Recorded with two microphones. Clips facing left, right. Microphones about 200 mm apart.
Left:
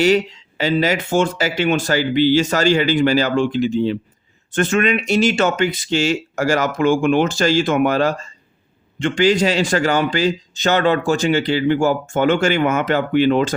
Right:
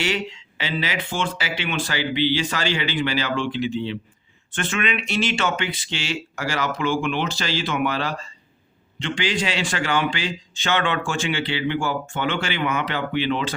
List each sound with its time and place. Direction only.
0.0 s a man's voice: 40° left (ahead or behind)